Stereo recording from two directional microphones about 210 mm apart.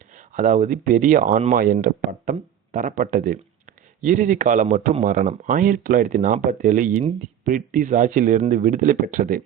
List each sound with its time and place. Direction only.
0.3 s speech: 35° right (ahead or behind)